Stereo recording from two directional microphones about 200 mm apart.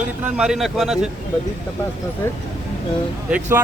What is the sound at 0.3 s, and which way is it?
Speech, 5° right (ahead or behind).